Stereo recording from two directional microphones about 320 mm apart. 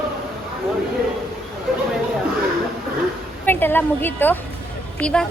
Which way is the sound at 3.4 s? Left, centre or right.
Centre.